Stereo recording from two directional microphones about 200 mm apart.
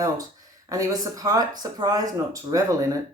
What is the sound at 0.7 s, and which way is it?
Speech, 15° right (ahead or behind).